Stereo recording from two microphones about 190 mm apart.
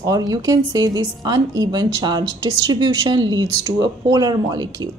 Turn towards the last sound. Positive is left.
turn(degrees=-20)  # may be behind; listen again after turning